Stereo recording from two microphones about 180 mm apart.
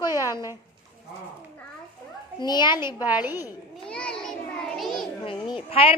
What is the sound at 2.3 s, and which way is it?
Speech, 25° left (ahead or behind).